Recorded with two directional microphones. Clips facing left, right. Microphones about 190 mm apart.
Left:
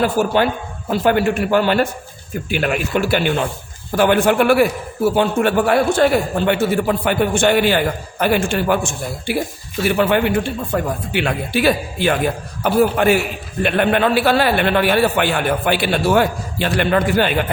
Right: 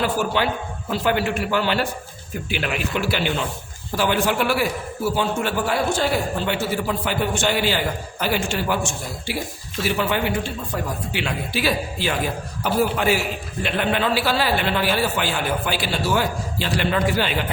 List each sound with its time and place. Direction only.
0.0 s a man's voice: 45° left (ahead or behind)